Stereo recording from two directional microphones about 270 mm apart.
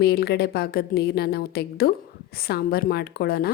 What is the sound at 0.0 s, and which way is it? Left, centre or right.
A woman's voice, left.